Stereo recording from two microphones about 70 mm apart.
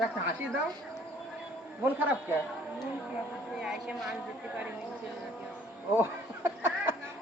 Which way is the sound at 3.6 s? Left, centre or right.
Centre.